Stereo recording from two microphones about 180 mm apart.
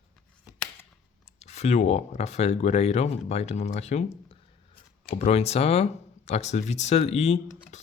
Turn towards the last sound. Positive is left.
turn(degrees=35)  # may be behind; listen again after turning